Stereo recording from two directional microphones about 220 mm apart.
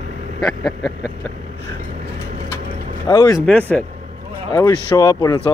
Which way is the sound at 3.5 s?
5° left (ahead or behind).